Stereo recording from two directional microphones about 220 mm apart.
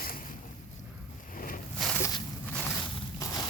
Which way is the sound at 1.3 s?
40° left (ahead or behind).